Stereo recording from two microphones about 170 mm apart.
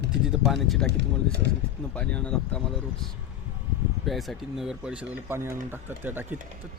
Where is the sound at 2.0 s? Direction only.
5° left (ahead or behind).